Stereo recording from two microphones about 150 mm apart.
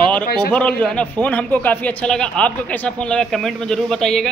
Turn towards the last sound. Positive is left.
turn(degrees=5)  # may be behind; listen again after turning